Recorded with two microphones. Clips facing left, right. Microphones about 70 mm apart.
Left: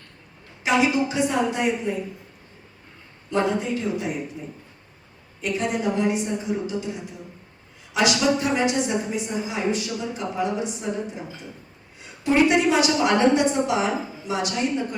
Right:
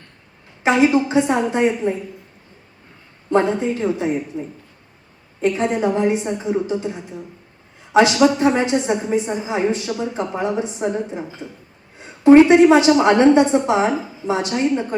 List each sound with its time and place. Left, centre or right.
0.6 s a woman's voice: right
3.2 s a woman's voice: right
11.9 s a sound: right
12.6 s a woman's voice: right